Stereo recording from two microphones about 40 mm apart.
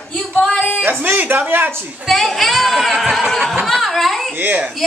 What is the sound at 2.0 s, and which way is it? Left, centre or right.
Speech, centre.